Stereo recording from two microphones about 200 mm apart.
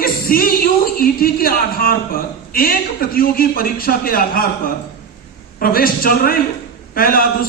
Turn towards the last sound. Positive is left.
turn(degrees=45)  # may be behind; listen again after turning